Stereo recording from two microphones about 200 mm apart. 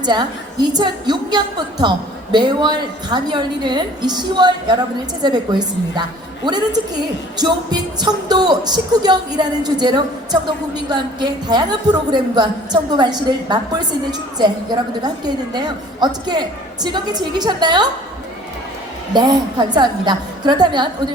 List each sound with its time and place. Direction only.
0.0 s a woman's voice: 20° right (ahead or behind)
19.1 s a woman's voice: 20° right (ahead or behind)